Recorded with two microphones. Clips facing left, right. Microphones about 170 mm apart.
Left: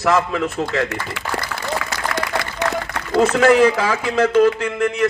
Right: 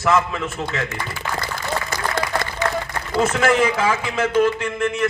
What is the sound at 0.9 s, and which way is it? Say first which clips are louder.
Speech: left 2 dB; 70° left (ahead or behind).